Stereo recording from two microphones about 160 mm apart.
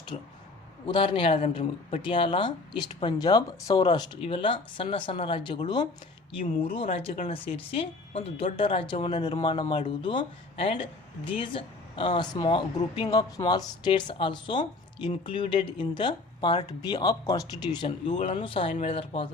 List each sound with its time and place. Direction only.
0.1 s speech: 40° left (ahead or behind)